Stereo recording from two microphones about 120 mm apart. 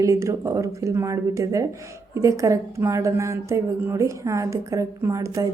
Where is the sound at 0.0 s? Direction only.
25° right (ahead or behind).